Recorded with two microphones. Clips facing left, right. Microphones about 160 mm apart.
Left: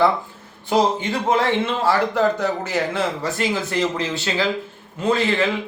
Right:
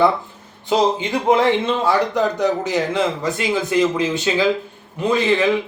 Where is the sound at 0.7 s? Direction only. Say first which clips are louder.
Right 1 dB; 15° right (ahead or behind).